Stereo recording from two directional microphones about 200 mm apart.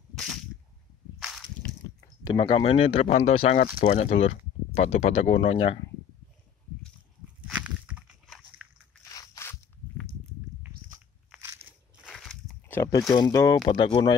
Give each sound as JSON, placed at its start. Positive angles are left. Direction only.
{"t": 0.1, "sound": "a sound", "side_deg": 0}
{"t": 2.2, "sound": "speech", "side_deg": 25}
{"t": 7.4, "sound": "walk", "side_deg": -5}
{"t": 9.1, "sound": "crackle", "side_deg": 15}
{"t": 12.1, "sound": "a sound", "side_deg": 0}
{"t": 13.1, "sound": "speech", "side_deg": 20}